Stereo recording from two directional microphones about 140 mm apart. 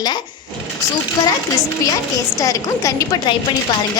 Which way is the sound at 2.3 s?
25° left (ahead or behind).